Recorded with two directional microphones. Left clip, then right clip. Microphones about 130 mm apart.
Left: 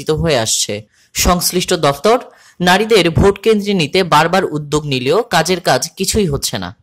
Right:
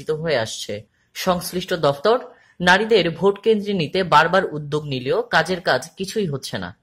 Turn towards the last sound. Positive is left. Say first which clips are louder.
# left 8 dB
turn(degrees=30)  # may be behind; listen again after turning